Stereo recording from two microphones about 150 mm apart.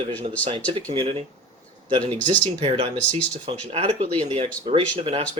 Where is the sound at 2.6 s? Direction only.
45° right (ahead or behind).